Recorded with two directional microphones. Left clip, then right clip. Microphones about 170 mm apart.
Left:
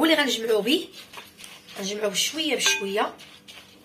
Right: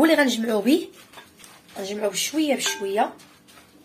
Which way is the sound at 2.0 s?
65° right (ahead or behind).